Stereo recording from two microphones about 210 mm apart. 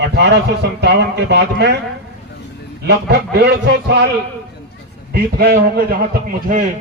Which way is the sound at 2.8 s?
50° right (ahead or behind).